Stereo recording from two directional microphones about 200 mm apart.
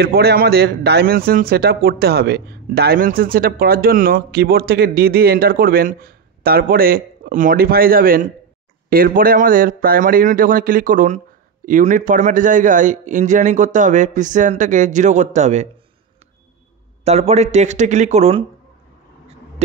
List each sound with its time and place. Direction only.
0.0 s a man's voice: 55° right (ahead or behind); by 15.7 s 35° right (ahead or behind)
17.0 s a man's voice: 30° right (ahead or behind)